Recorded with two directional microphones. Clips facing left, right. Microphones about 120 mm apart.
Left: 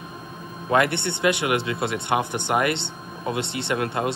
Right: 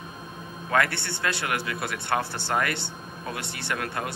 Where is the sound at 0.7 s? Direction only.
20° left (ahead or behind).